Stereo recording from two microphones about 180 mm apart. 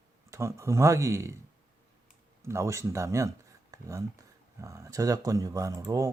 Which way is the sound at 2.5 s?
15° right (ahead or behind).